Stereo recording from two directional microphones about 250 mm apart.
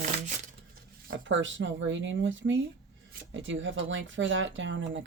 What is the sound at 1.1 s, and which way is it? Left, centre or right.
Speech, right.